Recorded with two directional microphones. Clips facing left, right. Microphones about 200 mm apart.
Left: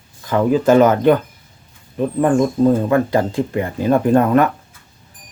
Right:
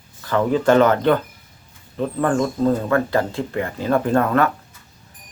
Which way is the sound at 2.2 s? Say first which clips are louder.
Left 5 dB; 15° left (ahead or behind).